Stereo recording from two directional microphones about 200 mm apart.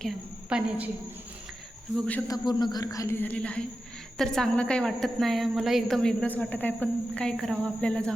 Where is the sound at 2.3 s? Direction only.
20° left (ahead or behind).